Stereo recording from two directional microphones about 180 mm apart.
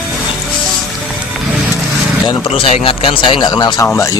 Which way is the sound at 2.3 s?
30° left (ahead or behind).